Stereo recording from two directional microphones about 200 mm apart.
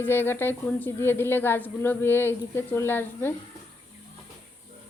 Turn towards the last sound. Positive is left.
turn(degrees=10)  # may be behind; listen again after turning